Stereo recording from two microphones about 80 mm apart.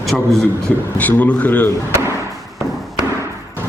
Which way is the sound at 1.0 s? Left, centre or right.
Centre.